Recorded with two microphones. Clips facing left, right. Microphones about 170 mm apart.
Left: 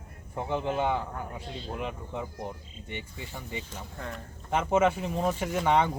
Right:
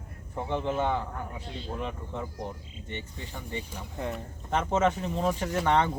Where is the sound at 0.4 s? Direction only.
10° left (ahead or behind).